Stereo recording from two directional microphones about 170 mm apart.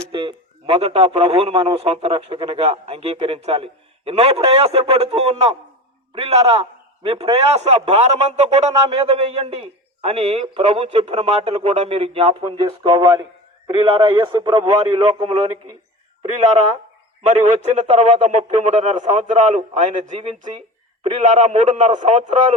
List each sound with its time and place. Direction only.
0.1 s a man's voice: 30° right (ahead or behind)
17.2 s a man's voice: 45° right (ahead or behind)